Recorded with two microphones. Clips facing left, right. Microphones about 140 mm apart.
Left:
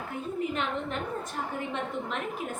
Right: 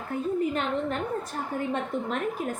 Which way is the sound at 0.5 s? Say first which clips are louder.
Right 4 dB; 40° right (ahead or behind).